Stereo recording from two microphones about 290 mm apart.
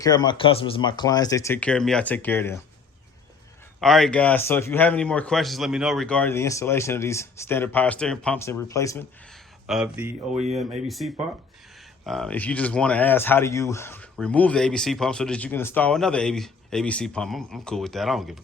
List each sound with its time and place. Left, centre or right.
0.0 s speech: centre
3.8 s speech: centre
9.6 s speech: centre
10.3 s speech: right
10.8 s speech: centre